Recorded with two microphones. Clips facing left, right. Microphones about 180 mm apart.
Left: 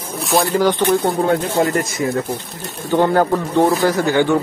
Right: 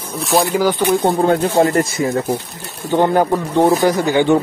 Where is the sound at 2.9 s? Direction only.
15° right (ahead or behind).